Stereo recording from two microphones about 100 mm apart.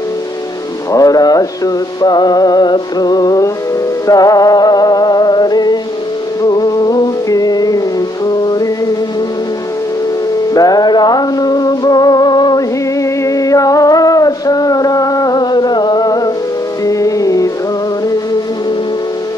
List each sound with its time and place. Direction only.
0.9 s music: 40° left (ahead or behind)
10.5 s music: 40° left (ahead or behind)
13.0 s music: 30° left (ahead or behind)